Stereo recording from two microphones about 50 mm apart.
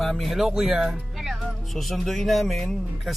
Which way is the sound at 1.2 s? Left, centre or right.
Centre.